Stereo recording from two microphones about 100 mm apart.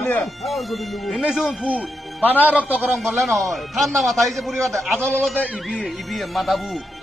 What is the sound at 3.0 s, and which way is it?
A man's voice, centre (ahead or behind).